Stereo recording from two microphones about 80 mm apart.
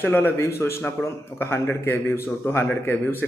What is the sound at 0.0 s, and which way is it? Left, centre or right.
A man's voice, left.